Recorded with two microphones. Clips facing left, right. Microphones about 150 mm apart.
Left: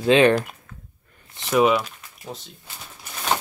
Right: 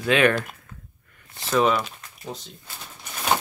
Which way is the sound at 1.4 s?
10° left (ahead or behind).